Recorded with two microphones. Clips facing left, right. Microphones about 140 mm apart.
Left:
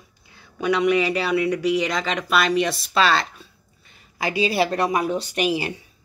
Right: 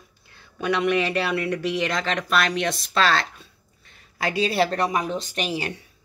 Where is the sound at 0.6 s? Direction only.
Centre (ahead or behind).